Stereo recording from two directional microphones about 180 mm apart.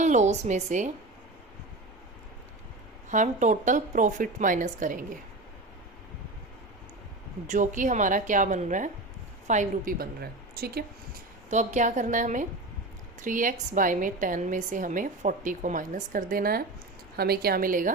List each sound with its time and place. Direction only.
0.0 s speech: 40° right (ahead or behind)
3.1 s a woman's voice: 45° right (ahead or behind)
7.4 s a woman's voice: 45° right (ahead or behind)
11.4 s a woman's voice: 40° right (ahead or behind)